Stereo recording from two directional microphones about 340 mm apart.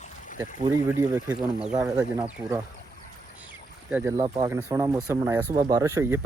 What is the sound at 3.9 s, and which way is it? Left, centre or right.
Speech, centre.